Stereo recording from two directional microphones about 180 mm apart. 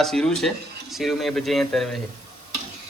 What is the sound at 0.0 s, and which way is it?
Speech, centre (ahead or behind).